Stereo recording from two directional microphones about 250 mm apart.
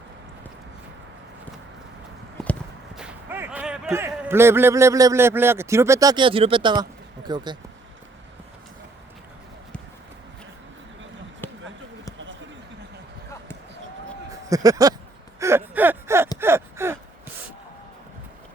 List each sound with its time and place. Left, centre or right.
2.4 s speech: centre
14.5 s speech: centre
15.4 s a sound: centre
16.4 s gasp: centre